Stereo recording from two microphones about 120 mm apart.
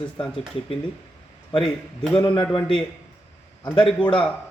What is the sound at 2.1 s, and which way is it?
Speech, 40° left (ahead or behind).